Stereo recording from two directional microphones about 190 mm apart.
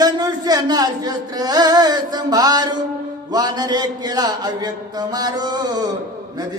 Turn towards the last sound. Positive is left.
turn(degrees=-20)  # may be behind; listen again after turning